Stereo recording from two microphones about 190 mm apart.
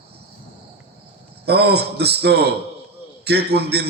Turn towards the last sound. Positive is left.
turn(degrees=-60)  # may be behind; listen again after turning